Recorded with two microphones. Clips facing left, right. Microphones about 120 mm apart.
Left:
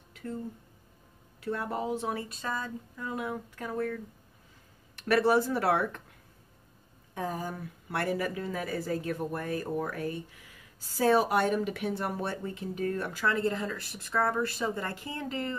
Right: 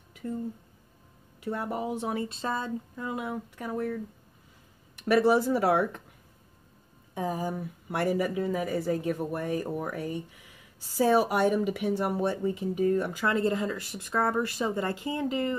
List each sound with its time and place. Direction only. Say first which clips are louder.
0.1 s a sound: right 3 dB; 15° right (ahead or behind)
1.4 s speech: right 1 dB; 15° right (ahead or behind)
2.2 s speech: right 4 dB; 25° right (ahead or behind)
3.2 s speech: right 1 dB; 10° right (ahead or behind)
5.0 s speech: right 2 dB; 15° right (ahead or behind)
7.2 s speech: right 4 dB; 15° right (ahead or behind)